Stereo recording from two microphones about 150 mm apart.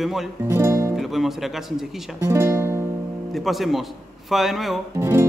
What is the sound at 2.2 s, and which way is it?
Music, 15° right (ahead or behind).